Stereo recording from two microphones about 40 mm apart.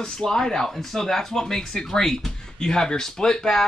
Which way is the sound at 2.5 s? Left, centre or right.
Centre.